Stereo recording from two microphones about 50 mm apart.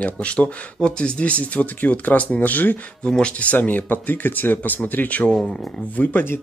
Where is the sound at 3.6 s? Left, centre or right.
Left.